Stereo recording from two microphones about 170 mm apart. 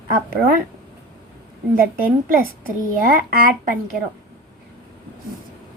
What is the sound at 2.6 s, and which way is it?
A woman's voice, 55° right (ahead or behind).